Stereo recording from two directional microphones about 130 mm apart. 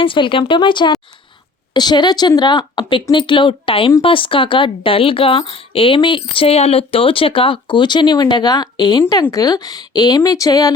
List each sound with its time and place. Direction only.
0.0 s speech: 40° left (ahead or behind)